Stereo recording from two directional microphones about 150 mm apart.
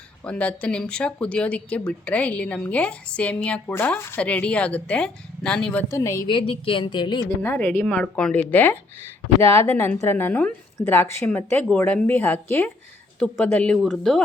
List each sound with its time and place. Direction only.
0.3 s speech: 10° left (ahead or behind)
5.9 s a woman's voice: 20° left (ahead or behind)
6.2 s speech: 35° left (ahead or behind)
7.4 s speech: 15° left (ahead or behind)